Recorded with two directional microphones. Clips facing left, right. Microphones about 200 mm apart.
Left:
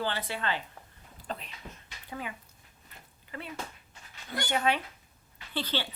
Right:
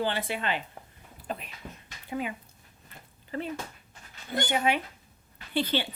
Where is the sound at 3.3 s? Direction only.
35° right (ahead or behind).